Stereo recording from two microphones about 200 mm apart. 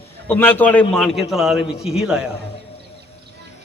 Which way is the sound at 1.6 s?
30° left (ahead or behind).